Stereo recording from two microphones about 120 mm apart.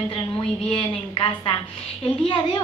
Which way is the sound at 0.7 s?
45° left (ahead or behind).